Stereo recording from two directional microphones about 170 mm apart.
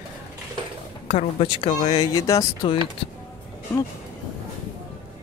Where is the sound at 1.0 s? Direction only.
35° left (ahead or behind).